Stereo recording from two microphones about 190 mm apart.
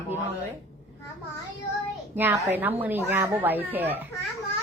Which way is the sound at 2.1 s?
10° right (ahead or behind).